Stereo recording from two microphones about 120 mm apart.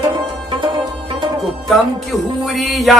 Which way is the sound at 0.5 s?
45° right (ahead or behind).